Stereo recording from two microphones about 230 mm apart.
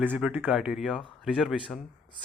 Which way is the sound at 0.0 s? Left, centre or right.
Centre.